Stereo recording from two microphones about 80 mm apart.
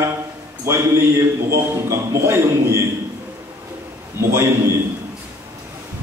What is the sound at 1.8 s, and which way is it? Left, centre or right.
Speech, right.